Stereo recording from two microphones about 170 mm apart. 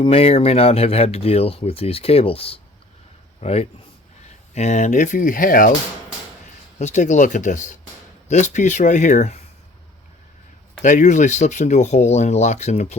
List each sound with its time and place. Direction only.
0.0 s speech: 35° left (ahead or behind); by 5.7 s 50° left (ahead or behind)
6.7 s speech: 45° left (ahead or behind)
10.8 s speech: 45° left (ahead or behind)